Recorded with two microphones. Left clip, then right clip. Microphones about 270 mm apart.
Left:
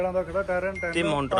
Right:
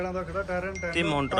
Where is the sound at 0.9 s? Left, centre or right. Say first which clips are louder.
Even; centre.